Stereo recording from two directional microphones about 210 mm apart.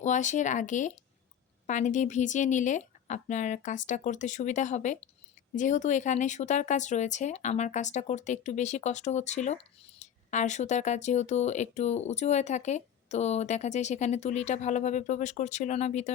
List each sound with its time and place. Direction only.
0.0 s speech: 35° left (ahead or behind)